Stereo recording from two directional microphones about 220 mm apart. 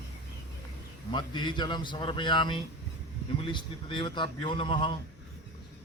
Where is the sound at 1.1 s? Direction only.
20° left (ahead or behind).